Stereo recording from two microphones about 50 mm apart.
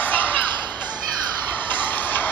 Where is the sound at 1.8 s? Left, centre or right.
Left.